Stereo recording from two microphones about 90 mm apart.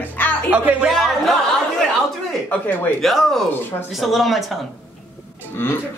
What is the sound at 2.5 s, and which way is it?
Speech, 20° left (ahead or behind).